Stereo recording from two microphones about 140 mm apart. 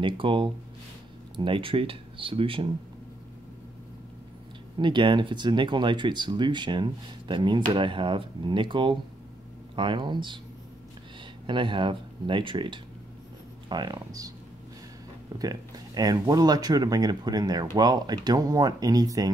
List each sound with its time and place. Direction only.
0.0 s speech: 35° right (ahead or behind)
4.7 s speech: 35° right (ahead or behind)
11.4 s speech: 35° right (ahead or behind)
15.3 s speech: 25° right (ahead or behind)